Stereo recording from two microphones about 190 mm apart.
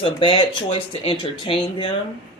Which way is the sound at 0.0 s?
25° left (ahead or behind).